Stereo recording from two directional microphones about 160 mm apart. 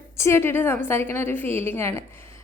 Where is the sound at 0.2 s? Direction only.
15° left (ahead or behind).